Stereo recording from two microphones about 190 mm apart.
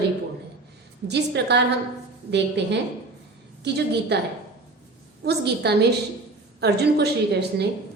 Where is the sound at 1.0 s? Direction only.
60° right (ahead or behind).